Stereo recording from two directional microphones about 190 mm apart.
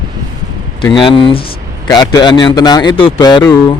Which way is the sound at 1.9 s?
20° left (ahead or behind).